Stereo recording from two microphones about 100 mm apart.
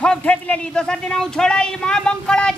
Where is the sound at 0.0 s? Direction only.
10° left (ahead or behind).